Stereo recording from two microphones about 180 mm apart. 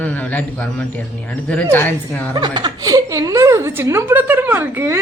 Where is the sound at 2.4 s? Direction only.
25° right (ahead or behind).